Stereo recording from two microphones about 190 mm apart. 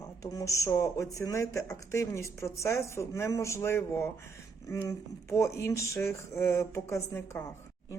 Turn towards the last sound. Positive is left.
turn(degrees=15)  # may be behind; listen again after turning